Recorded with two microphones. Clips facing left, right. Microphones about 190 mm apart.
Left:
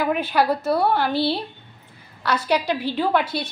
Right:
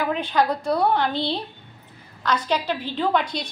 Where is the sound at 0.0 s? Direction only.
10° left (ahead or behind).